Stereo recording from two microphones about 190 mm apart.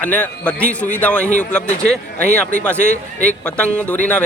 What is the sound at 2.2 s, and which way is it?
Speech, 50° right (ahead or behind).